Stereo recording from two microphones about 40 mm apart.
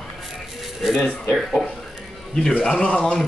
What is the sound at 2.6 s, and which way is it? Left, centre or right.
Speech, left.